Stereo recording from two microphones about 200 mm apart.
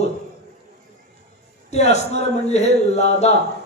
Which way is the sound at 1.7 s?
35° left (ahead or behind).